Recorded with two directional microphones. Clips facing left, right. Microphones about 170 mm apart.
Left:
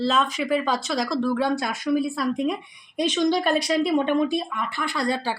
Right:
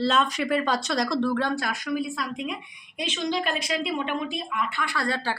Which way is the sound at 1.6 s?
25° left (ahead or behind).